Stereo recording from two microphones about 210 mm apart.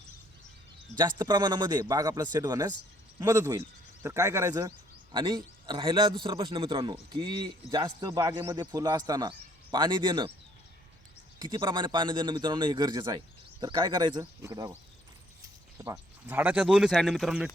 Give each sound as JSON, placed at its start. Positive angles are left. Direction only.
{"t": 0.9, "sound": "a man's voice", "side_deg": -20}
{"t": 11.3, "sound": "a man's voice", "side_deg": -20}
{"t": 15.8, "sound": "speech", "side_deg": -15}